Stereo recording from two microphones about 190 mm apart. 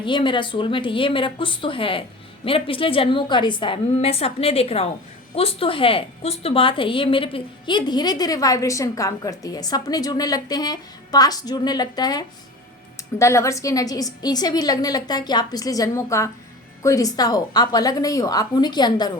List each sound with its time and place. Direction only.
0.0 s a woman's voice: 25° left (ahead or behind)